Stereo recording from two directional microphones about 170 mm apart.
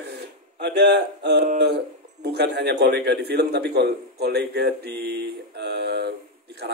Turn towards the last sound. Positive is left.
turn(degrees=-75)  # may be behind; listen again after turning